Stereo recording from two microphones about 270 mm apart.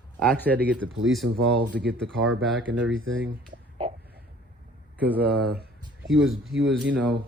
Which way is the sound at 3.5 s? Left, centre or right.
Right.